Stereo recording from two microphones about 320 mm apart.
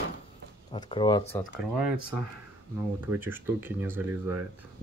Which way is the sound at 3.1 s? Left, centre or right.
Centre.